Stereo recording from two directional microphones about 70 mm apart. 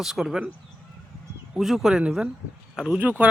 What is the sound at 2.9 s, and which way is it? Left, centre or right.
Speech, right.